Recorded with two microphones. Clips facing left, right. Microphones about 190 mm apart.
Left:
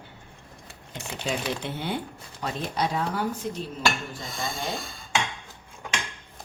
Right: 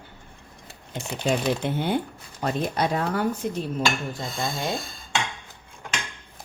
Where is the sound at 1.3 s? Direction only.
50° right (ahead or behind).